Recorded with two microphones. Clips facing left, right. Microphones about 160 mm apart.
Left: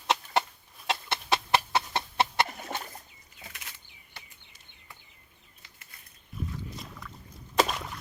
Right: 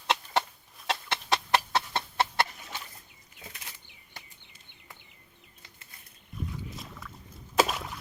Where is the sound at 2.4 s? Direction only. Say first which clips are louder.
Left 6 dB; 55° left (ahead or behind).